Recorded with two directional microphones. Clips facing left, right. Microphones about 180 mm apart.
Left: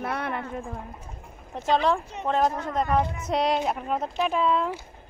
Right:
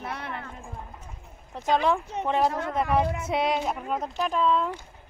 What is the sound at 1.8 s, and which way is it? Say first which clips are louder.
Speech: even; 15° right (ahead or behind).